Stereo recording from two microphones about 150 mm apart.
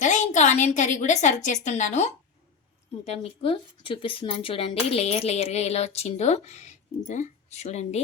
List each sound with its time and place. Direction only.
0.0 s a woman's voice: 55° left (ahead or behind)